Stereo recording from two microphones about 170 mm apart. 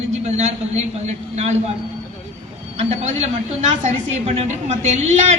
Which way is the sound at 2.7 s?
40° right (ahead or behind).